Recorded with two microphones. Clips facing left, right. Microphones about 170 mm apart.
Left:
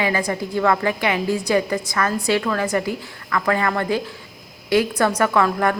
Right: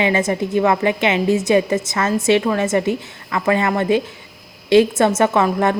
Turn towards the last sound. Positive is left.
turn(degrees=-25)  # may be behind; listen again after turning